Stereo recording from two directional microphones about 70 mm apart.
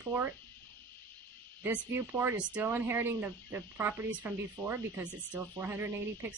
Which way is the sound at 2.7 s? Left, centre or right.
Right.